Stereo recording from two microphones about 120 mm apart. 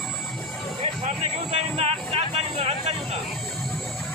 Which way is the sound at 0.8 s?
60° right (ahead or behind).